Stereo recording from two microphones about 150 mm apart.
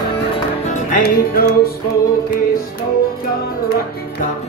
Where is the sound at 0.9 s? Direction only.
90° left.